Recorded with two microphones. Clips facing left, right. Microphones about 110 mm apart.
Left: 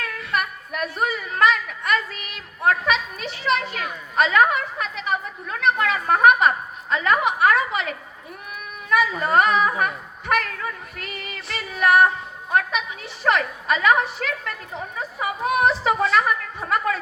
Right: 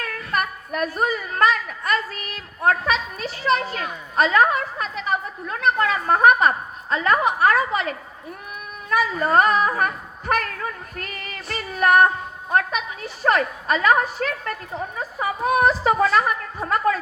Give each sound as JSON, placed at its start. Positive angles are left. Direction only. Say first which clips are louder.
{"t": 0.0, "sound": "a woman's voice", "louder": "right 1 dB", "side_deg": -40}
{"t": 9.2, "sound": "a woman's voice", "louder": "right 2 dB", "side_deg": -40}